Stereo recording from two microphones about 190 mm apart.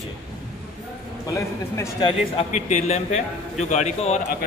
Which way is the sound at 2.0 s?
35° left (ahead or behind).